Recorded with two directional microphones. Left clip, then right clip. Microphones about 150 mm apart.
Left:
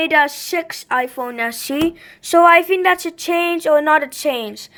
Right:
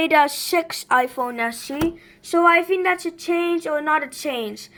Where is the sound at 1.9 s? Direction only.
50° left (ahead or behind).